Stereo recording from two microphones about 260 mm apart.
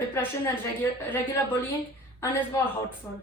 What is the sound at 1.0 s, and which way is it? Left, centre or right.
Speech, centre.